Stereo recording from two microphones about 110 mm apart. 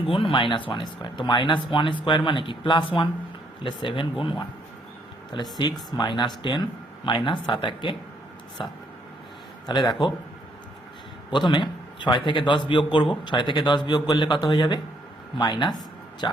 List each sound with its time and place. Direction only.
0.1 s speech: 55° left (ahead or behind)
5.3 s speech: 40° left (ahead or behind)
9.6 s speech: 45° left (ahead or behind)
11.3 s speech: 45° left (ahead or behind)